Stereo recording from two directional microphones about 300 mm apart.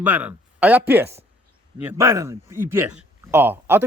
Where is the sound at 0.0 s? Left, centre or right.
Centre.